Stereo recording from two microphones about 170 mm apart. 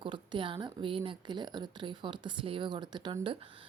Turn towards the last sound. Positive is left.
turn(degrees=-30)  # may be behind; listen again after turning